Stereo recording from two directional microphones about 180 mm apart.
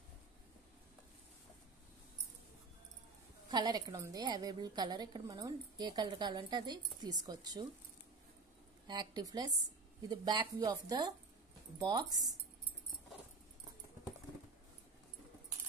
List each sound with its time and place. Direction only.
3.4 s a woman's voice: 20° right (ahead or behind)
8.8 s a woman's voice: 25° right (ahead or behind)